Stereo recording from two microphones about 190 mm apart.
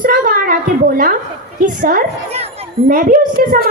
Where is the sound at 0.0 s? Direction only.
45° right (ahead or behind).